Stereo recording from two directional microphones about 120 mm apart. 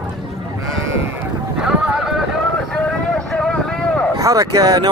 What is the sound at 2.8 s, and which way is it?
Vehicle, 5° left (ahead or behind).